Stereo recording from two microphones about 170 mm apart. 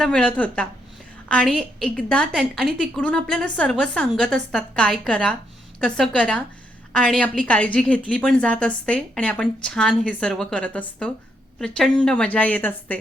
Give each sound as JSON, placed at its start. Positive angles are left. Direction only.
{"t": 0.0, "sound": "a woman's voice", "side_deg": 5}